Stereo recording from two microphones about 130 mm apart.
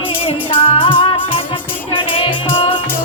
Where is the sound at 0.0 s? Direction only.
40° left (ahead or behind).